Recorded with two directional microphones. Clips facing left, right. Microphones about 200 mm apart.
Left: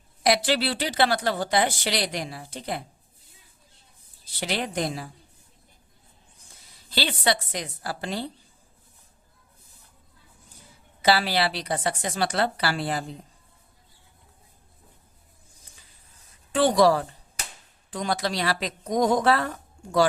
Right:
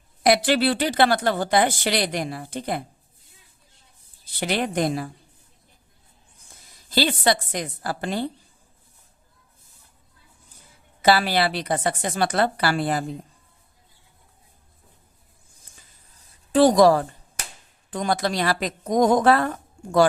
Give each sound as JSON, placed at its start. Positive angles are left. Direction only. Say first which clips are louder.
{"t": 0.2, "sound": "speech", "louder": "right 4 dB", "side_deg": -55}
{"t": 4.4, "sound": "a woman's voice", "louder": "right 4 dB", "side_deg": -55}
{"t": 6.9, "sound": "speech", "louder": "right 4 dB", "side_deg": -45}
{"t": 11.0, "sound": "speech", "louder": "right 3 dB", "side_deg": -50}
{"t": 15.7, "sound": "finger snapping", "louder": "right 1 dB", "side_deg": -40}
{"t": 17.9, "sound": "speech", "louder": "right 4 dB", "side_deg": -50}